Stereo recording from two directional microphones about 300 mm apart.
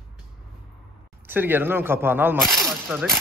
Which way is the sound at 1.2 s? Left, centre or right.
Centre.